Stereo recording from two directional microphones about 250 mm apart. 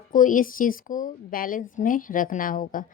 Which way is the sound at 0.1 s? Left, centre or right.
Left.